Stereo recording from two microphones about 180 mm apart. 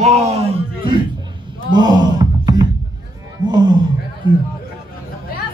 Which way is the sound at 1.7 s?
25° right (ahead or behind).